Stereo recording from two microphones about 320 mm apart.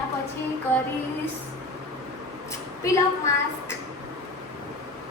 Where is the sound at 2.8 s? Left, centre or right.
Centre.